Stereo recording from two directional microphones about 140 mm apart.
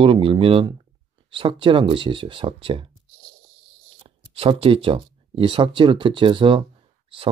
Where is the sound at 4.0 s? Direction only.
40° right (ahead or behind).